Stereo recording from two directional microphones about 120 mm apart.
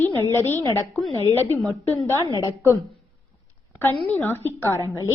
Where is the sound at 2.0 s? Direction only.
20° left (ahead or behind).